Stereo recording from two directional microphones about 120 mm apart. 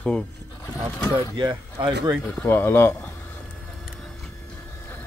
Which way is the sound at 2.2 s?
20° left (ahead or behind).